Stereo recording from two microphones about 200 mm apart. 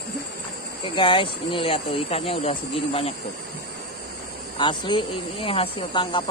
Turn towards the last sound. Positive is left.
turn(degrees=25)  # may be behind; listen again after turning